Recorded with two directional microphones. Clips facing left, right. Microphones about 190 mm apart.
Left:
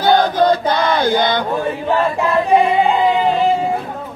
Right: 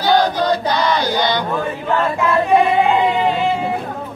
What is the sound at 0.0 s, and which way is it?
Chant, 50° left (ahead or behind).